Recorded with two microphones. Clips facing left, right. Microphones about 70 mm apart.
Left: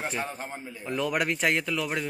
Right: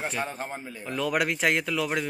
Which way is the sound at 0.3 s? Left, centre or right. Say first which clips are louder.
Right 2 dB; right.